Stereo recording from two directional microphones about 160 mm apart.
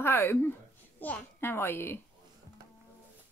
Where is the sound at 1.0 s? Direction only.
10° left (ahead or behind).